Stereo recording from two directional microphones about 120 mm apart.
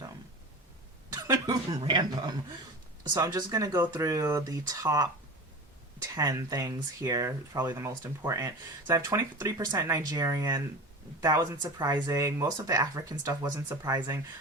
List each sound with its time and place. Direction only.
1.1 s cough: 30° right (ahead or behind)
1.8 s speech: 40° right (ahead or behind)
6.1 s speech: 30° right (ahead or behind)